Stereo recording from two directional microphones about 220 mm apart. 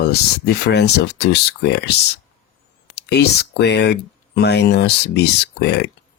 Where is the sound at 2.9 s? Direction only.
50° left (ahead or behind).